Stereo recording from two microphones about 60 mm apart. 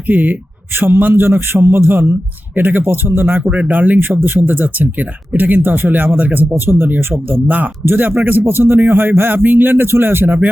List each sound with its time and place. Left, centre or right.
0.1 s speech: right
3.4 s speech: right
6.5 s speech: right